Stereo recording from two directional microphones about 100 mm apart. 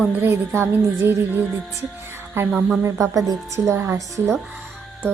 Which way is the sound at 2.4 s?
25° right (ahead or behind).